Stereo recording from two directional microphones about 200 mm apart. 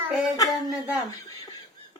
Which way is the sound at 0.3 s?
15° left (ahead or behind).